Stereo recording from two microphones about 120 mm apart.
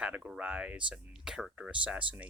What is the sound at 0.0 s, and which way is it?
Speech, 10° right (ahead or behind).